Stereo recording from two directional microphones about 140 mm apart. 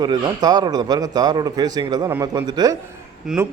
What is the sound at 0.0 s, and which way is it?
A man's voice, 30° right (ahead or behind).